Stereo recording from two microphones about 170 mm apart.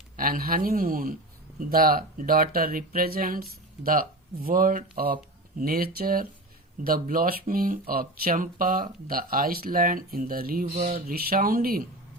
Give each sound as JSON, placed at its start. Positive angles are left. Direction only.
{"t": 0.2, "sound": "speech", "side_deg": -55}